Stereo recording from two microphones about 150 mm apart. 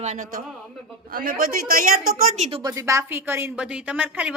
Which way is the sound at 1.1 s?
70° right (ahead or behind).